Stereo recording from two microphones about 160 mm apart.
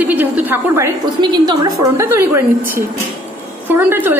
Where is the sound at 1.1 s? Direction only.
30° right (ahead or behind).